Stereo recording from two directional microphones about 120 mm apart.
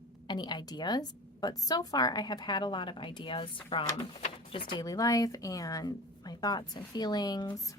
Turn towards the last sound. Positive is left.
turn(degrees=35)  # may be behind; listen again after turning